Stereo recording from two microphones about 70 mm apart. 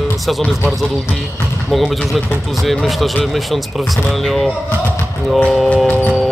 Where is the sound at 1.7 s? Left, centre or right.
Centre.